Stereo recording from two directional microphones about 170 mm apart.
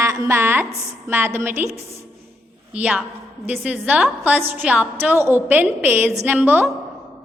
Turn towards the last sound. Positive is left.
turn(degrees=-10)  # may be behind; listen again after turning